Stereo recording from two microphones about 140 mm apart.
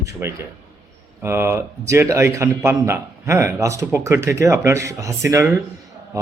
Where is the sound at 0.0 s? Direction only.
20° right (ahead or behind).